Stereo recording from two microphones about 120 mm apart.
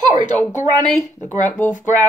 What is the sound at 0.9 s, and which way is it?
Speech, 25° left (ahead or behind).